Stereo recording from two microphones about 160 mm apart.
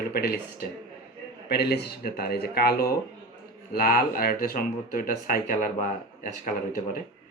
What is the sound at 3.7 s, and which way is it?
Speech, 70° left (ahead or behind).